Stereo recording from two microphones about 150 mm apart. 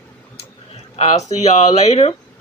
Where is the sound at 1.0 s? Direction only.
45° left (ahead or behind).